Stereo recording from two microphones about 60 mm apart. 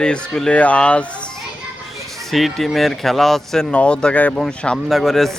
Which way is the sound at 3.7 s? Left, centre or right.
Centre.